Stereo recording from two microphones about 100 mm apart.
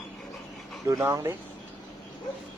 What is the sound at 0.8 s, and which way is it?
Speech, 30° right (ahead or behind).